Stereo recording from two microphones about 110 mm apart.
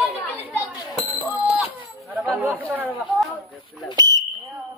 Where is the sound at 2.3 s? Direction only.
15° right (ahead or behind).